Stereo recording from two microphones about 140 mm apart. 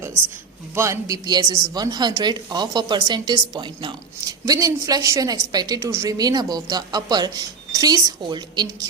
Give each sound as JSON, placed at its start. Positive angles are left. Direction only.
{"t": 0.8, "sound": "speech", "side_deg": -25}